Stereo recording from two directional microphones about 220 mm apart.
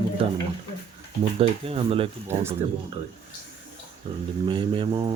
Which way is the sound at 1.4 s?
25° right (ahead or behind).